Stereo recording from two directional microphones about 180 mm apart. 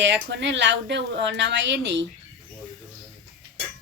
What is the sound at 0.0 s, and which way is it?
A woman's voice, 80° right.